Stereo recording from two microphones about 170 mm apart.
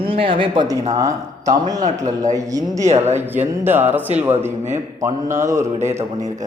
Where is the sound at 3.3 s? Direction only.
10° right (ahead or behind).